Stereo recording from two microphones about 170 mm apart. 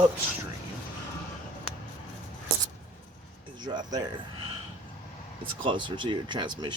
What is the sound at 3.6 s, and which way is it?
Speech, 25° right (ahead or behind).